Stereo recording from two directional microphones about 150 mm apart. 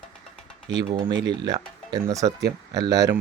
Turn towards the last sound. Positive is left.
turn(degrees=-25)  # may be behind; listen again after turning